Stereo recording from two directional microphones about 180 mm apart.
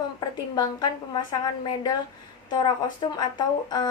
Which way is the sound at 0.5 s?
20° left (ahead or behind).